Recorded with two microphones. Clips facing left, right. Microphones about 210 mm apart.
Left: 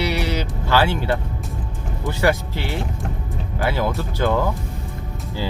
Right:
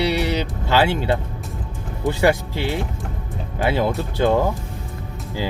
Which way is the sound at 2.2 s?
20° right (ahead or behind).